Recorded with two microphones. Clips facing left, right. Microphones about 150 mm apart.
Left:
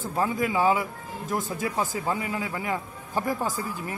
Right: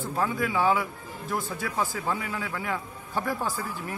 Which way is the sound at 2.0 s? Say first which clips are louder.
Left 2 dB; 20° left (ahead or behind).